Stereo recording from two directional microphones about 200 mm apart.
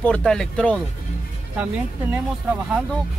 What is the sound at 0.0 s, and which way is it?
Speech, 5° left (ahead or behind).